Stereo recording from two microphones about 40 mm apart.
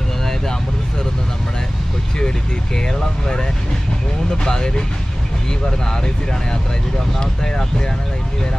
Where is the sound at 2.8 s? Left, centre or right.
Centre.